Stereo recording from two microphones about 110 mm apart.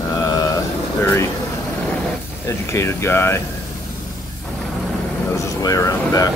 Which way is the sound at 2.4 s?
25° left (ahead or behind).